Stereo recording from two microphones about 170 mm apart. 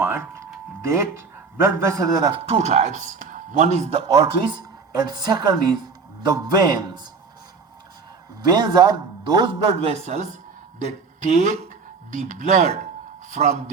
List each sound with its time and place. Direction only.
0.0 s a man's voice: 15° right (ahead or behind)
2.5 s a man's voice: 40° right (ahead or behind)
4.1 s a man's voice: 25° right (ahead or behind)
8.4 s a man's voice: 25° right (ahead or behind); by 13.6 s 45° right (ahead or behind)